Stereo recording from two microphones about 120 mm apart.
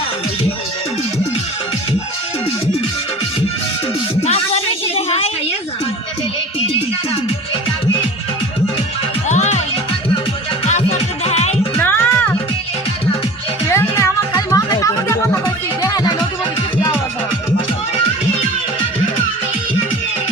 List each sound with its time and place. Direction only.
4.2 s music: 60° left (ahead or behind)
9.3 s music: 70° left (ahead or behind)
10.7 s music: 70° left (ahead or behind)
11.8 s music: 20° left (ahead or behind)
13.7 s music: 20° left (ahead or behind)